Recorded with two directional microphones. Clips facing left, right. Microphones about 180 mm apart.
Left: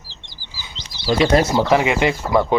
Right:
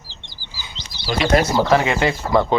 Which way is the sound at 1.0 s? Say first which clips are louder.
Left 2 dB; 35° left (ahead or behind).